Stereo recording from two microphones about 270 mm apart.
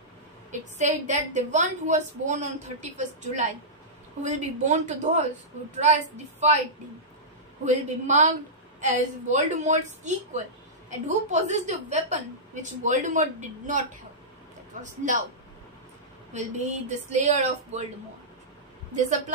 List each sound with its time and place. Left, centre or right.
0.5 s a woman's voice: right
7.6 s a woman's voice: right
16.3 s a woman's voice: right
18.9 s a woman's voice: right